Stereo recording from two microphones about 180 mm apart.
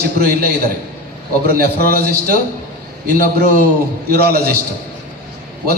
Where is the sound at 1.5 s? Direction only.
60° right (ahead or behind).